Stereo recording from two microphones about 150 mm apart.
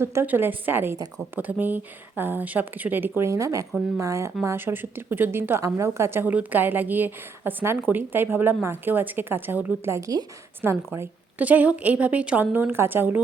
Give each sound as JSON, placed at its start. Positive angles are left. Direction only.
{"t": 0.0, "sound": "a woman's voice", "side_deg": -15}